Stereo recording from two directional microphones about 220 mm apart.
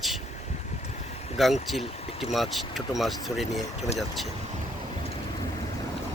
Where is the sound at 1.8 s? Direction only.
30° left (ahead or behind).